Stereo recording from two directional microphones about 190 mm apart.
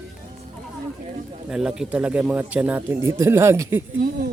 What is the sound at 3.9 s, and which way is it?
Speech, 50° right (ahead or behind).